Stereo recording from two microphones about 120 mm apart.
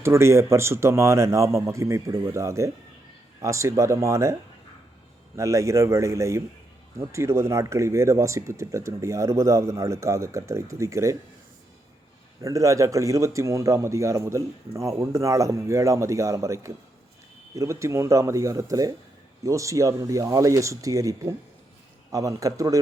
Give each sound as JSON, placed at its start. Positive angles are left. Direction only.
{"t": 0.0, "sound": "a man's voice", "side_deg": -25}
{"t": 5.4, "sound": "a man's voice", "side_deg": -25}
{"t": 12.4, "sound": "a man's voice", "side_deg": -25}